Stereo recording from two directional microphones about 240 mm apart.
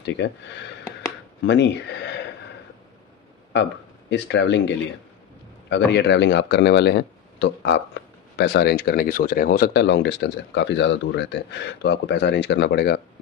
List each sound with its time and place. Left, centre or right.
0.0 s speech: left
1.4 s speech: left
4.1 s speech: left
5.7 s speech: left